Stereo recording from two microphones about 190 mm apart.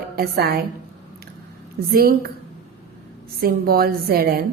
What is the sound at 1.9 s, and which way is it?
A woman's voice, 50° right (ahead or behind).